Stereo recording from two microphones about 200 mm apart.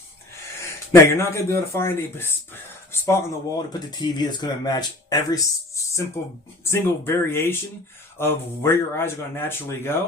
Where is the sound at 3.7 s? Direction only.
20° left (ahead or behind).